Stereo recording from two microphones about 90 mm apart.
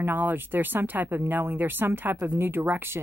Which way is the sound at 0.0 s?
20° right (ahead or behind).